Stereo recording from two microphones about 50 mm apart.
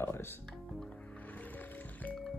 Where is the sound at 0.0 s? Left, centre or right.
Left.